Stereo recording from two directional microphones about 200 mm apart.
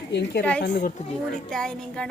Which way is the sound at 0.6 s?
45° left (ahead or behind).